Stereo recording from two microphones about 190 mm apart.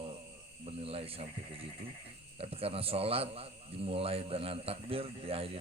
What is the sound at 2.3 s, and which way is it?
A man's voice, 30° right (ahead or behind).